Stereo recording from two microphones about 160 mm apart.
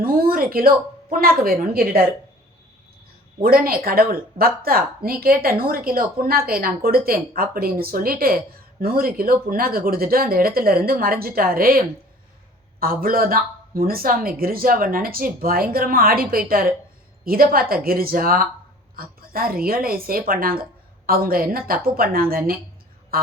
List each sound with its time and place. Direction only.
0.0 s a sound: 70° right (ahead or behind)
1.4 s speech: 65° right (ahead or behind)
3.4 s speech: 65° right (ahead or behind)